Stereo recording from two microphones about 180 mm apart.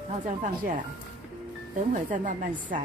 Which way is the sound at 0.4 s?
50° right (ahead or behind).